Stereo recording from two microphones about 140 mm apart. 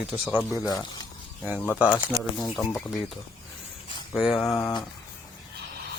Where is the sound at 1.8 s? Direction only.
10° right (ahead or behind).